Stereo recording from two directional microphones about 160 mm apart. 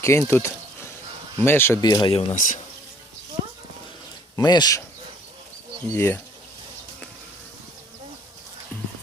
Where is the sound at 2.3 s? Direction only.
55° left (ahead or behind).